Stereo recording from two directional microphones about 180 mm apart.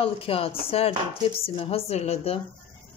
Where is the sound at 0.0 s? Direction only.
30° left (ahead or behind).